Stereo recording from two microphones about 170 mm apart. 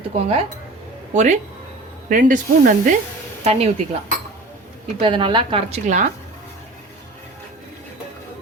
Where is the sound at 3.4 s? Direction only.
40° right (ahead or behind).